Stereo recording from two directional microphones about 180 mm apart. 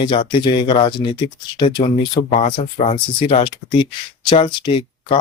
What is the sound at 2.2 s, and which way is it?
Speech, 35° left (ahead or behind).